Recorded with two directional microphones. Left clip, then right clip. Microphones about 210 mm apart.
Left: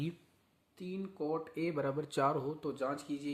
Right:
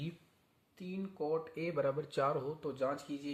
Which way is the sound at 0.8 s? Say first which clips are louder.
Even; 15° left (ahead or behind).